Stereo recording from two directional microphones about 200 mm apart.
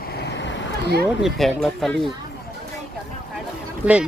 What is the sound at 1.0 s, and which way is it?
Speech, centre (ahead or behind).